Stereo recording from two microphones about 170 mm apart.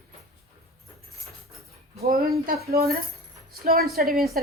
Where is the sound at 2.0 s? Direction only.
65° right (ahead or behind).